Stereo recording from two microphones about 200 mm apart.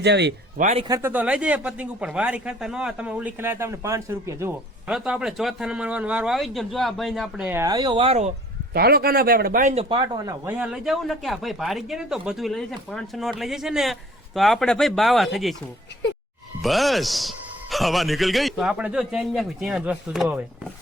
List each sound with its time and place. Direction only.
0.0 s speech: 60° right (ahead or behind)
0.5 s speech: 35° right (ahead or behind)
0.9 s a man's voice: 15° right (ahead or behind); by 8.3 s 30° right (ahead or behind)
8.7 s speech: 50° right (ahead or behind)
9.9 s speech: 20° right (ahead or behind)
10.6 s a man's voice: centre (ahead or behind)
16.6 s a man's voice: centre (ahead or behind)